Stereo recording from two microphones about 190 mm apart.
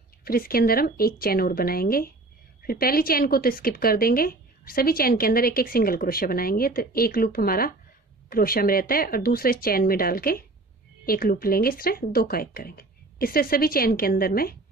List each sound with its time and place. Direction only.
0.2 s speech: 50° left (ahead or behind)